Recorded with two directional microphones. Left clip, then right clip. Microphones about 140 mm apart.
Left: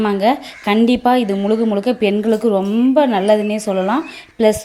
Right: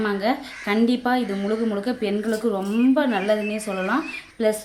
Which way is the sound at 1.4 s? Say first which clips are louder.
Left 8 dB; 35° left (ahead or behind).